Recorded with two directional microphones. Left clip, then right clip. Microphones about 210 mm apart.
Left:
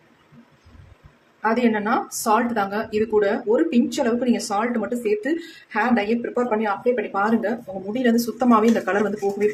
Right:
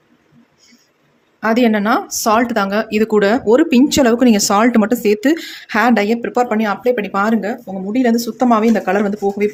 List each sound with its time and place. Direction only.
1.4 s speech: 45° right (ahead or behind)
7.9 s speech: 30° right (ahead or behind)